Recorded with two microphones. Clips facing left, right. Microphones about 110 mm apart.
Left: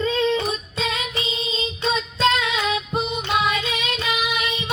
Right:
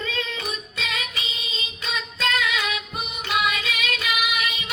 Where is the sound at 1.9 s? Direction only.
30° left (ahead or behind).